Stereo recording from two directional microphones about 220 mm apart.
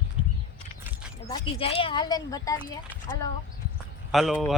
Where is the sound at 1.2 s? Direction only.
25° left (ahead or behind).